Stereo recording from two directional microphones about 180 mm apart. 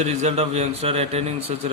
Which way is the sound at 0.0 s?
40° right (ahead or behind).